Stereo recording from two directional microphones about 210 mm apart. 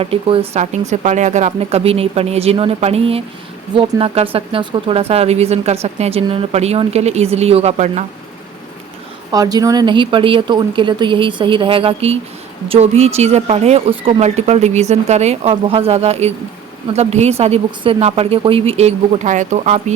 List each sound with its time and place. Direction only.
0.0 s speech: 25° right (ahead or behind)
9.3 s speech: 20° right (ahead or behind); by 19.8 s 35° right (ahead or behind)